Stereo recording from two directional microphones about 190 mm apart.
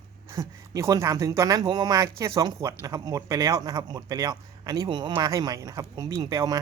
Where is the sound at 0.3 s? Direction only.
15° right (ahead or behind).